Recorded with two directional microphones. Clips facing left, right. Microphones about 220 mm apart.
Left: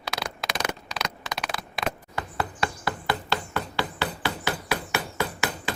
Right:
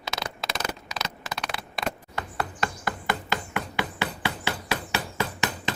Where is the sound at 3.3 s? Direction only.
20° right (ahead or behind).